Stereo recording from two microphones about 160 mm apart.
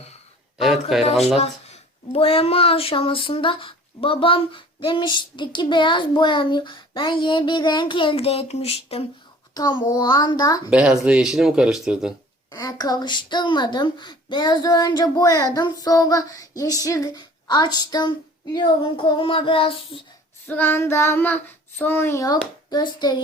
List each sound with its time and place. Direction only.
0.9 s speech: centre (ahead or behind)
1.4 s speech: 40° left (ahead or behind)
9.6 s speech: 25° left (ahead or behind)
10.7 s speech: 5° right (ahead or behind)
12.5 s speech: 25° left (ahead or behind)
20.5 s child singing: 10° left (ahead or behind)
22.7 s speech: 25° left (ahead or behind)